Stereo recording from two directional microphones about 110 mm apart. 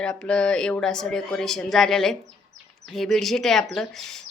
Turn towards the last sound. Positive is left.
turn(degrees=5)  # may be behind; listen again after turning